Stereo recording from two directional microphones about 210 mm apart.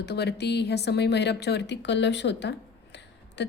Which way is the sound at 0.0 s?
50° left (ahead or behind).